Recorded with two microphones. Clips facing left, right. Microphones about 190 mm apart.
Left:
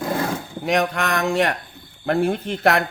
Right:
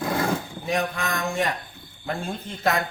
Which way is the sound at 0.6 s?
75° left (ahead or behind).